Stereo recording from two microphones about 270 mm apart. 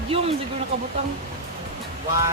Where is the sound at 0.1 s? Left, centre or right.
Right.